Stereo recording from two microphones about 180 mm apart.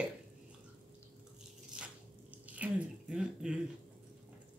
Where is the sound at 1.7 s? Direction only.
5° right (ahead or behind).